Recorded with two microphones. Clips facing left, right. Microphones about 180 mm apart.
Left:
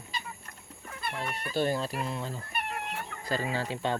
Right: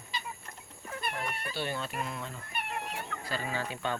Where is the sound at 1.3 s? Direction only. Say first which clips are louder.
Left 7 dB; 40° left (ahead or behind).